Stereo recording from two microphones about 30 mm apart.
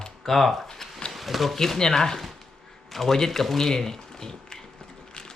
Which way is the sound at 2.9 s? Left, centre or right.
Centre.